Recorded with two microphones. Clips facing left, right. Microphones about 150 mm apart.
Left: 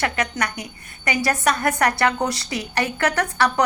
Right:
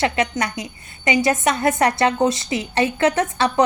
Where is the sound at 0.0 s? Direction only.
25° right (ahead or behind).